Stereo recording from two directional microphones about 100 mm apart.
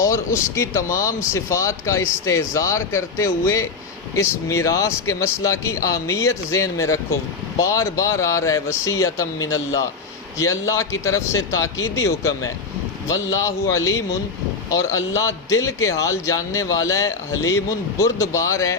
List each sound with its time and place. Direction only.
0.0 s a man's voice: 30° left (ahead or behind)